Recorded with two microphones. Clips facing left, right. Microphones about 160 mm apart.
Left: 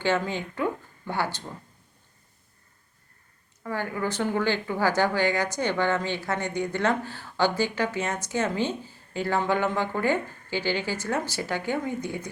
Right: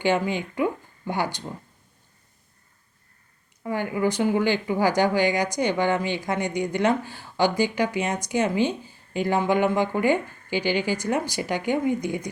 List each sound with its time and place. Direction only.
0.0 s speech: 15° right (ahead or behind)
3.6 s speech: 15° right (ahead or behind)